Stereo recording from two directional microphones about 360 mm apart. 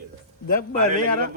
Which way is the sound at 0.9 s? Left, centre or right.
Right.